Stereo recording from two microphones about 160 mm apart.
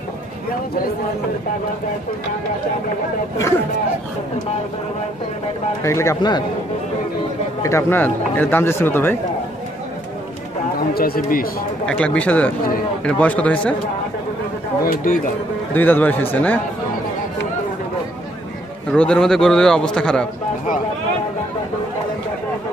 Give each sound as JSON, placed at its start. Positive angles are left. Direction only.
{"t": 5.9, "sound": "speech", "side_deg": 20}
{"t": 7.6, "sound": "speech", "side_deg": 15}
{"t": 11.0, "sound": "speech", "side_deg": 65}
{"t": 11.8, "sound": "speech", "side_deg": 5}
{"t": 14.8, "sound": "speech", "side_deg": 60}
{"t": 15.7, "sound": "speech", "side_deg": 10}
{"t": 18.9, "sound": "a man's voice", "side_deg": 5}